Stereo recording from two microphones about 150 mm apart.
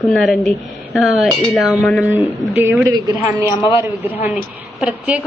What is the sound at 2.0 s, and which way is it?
A woman's voice, 10° right (ahead or behind).